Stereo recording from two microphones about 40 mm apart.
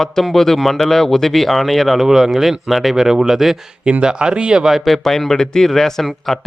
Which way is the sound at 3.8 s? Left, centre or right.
Right.